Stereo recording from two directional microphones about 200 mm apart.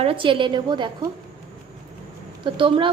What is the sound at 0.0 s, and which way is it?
Speech, 25° right (ahead or behind).